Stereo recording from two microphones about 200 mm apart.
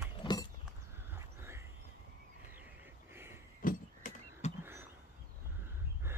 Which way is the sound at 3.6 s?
40° left (ahead or behind).